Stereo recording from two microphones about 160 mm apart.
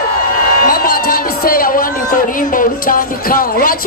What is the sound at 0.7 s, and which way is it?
A man's voice, 65° left (ahead or behind).